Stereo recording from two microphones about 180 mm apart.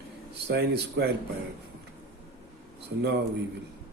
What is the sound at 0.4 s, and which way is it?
Speech, 70° right (ahead or behind).